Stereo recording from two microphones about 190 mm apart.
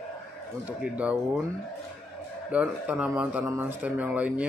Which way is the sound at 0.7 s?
5° right (ahead or behind).